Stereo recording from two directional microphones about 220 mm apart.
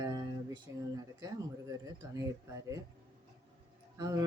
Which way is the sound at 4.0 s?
15° right (ahead or behind).